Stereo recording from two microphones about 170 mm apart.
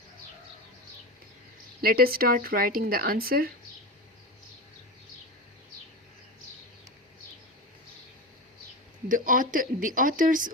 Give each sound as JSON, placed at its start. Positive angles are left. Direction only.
{"t": 1.8, "sound": "speech", "side_deg": -60}
{"t": 9.0, "sound": "speech", "side_deg": -50}